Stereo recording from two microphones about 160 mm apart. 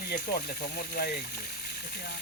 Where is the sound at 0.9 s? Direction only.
70° left (ahead or behind).